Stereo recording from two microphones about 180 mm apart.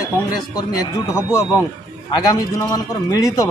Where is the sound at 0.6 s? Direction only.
15° left (ahead or behind).